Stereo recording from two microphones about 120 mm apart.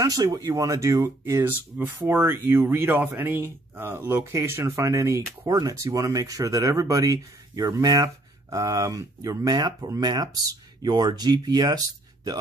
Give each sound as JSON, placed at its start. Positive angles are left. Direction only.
{"t": 0.0, "sound": "speech", "side_deg": -30}